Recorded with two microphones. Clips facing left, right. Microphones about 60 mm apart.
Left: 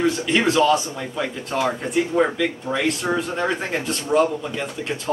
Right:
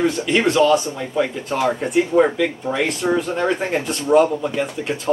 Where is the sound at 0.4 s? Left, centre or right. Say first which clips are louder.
Right 3 dB; centre.